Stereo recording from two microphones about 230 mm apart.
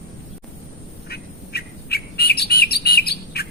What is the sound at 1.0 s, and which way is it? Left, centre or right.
Bird, left.